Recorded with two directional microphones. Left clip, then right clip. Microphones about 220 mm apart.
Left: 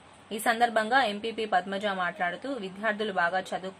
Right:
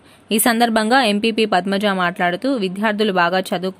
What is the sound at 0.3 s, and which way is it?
A woman's voice, 50° right (ahead or behind).